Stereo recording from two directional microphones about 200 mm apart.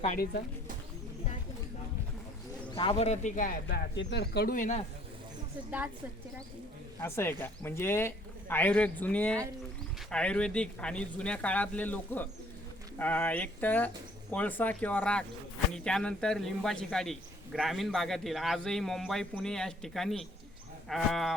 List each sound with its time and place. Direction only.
0.0 s speech: 35° left (ahead or behind)
2.6 s speech: 25° left (ahead or behind); by 3.8 s 40° left (ahead or behind)
3.9 s speech: 60° left (ahead or behind); by 4.8 s 40° left (ahead or behind)
7.0 s a man's voice: 10° left (ahead or behind)